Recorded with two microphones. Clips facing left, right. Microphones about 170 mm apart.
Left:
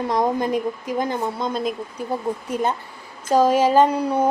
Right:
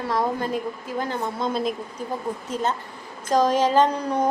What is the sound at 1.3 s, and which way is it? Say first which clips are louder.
Speech: left 1 dB; centre (ahead or behind).